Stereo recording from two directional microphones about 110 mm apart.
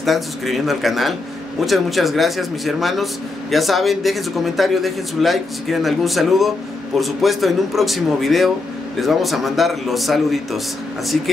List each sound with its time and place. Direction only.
0.0 s a man's voice: centre (ahead or behind)